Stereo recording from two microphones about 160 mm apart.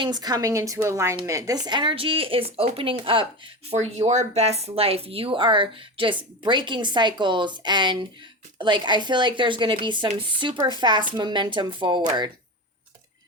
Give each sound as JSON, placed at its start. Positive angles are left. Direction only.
{"t": 0.0, "sound": "speech", "side_deg": -25}